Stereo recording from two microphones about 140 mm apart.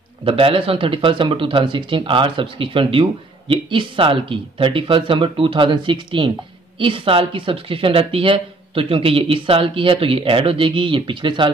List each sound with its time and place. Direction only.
0.2 s speech: 40° right (ahead or behind)